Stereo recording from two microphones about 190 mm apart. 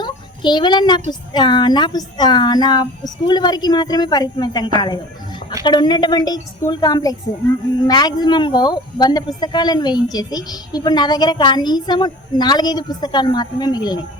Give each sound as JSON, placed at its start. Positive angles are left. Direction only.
{"t": 0.0, "sound": "child singing", "side_deg": 25}
{"t": 1.3, "sound": "speech", "side_deg": 25}